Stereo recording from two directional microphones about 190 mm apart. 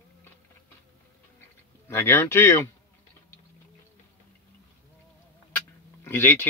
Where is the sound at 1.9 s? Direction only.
15° left (ahead or behind).